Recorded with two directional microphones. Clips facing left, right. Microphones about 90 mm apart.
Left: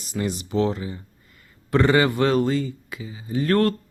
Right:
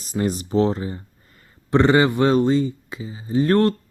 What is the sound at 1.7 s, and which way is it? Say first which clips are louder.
Speech: right 2 dB; 25° right (ahead or behind).